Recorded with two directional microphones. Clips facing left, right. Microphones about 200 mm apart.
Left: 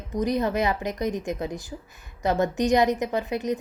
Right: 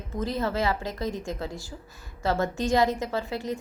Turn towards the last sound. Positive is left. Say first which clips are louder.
# left 4 dB
turn(degrees=20)  # may be behind; listen again after turning